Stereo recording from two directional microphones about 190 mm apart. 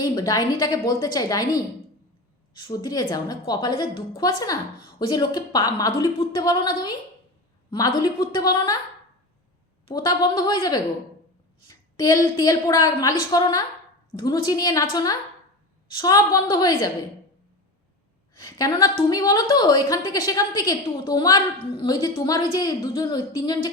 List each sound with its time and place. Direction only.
0.0 s a woman's voice: 20° left (ahead or behind)
9.8 s a woman's voice: 20° left (ahead or behind)
18.3 s a woman's voice: 20° left (ahead or behind)